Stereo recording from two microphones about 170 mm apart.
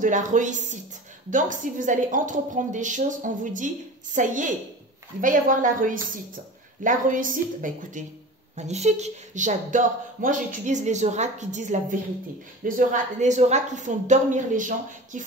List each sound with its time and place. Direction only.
0.0 s speech: 45° right (ahead or behind)